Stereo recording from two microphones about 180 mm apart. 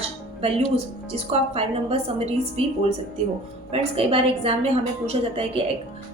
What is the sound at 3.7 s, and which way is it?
A woman's voice, 30° right (ahead or behind).